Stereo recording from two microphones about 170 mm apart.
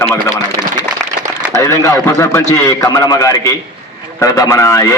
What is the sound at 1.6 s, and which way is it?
A man's voice, 15° left (ahead or behind).